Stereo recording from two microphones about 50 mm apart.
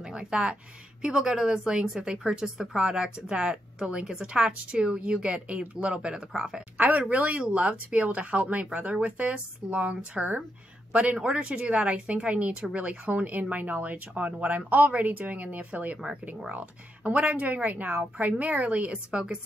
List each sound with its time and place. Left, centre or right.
0.0 s a woman's voice: centre
6.8 s a woman's voice: right